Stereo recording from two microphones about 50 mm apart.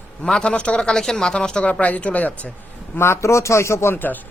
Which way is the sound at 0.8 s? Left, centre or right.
Centre.